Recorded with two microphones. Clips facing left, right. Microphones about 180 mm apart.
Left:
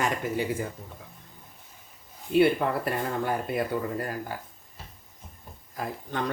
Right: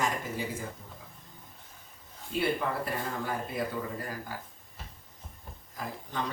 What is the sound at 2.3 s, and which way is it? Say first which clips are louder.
Speech: left 8 dB; 65° left (ahead or behind).